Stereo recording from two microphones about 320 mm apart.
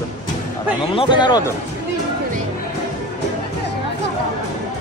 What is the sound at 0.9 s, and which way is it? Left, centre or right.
Speech, centre.